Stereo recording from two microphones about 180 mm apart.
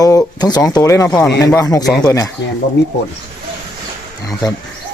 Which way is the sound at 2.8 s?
75° left (ahead or behind).